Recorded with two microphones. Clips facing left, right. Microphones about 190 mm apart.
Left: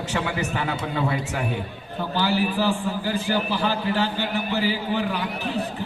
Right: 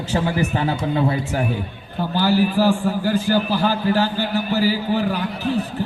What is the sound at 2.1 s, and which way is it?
A man's voice, 45° right (ahead or behind).